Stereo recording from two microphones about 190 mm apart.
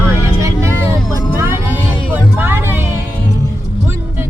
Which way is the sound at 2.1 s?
10° right (ahead or behind).